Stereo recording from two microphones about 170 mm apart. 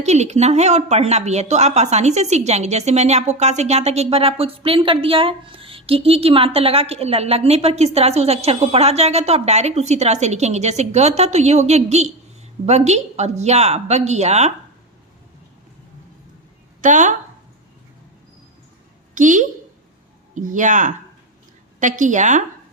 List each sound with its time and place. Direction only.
0.0 s a woman's voice: 40° right (ahead or behind)
16.8 s a woman's voice: 45° right (ahead or behind)
19.1 s a woman's voice: 50° right (ahead or behind)